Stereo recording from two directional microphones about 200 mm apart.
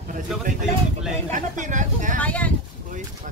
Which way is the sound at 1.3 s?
40° right (ahead or behind).